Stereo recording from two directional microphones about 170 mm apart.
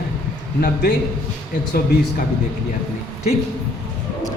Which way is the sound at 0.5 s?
60° left (ahead or behind).